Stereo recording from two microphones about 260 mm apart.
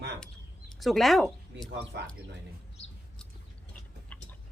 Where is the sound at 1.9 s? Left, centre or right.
Right.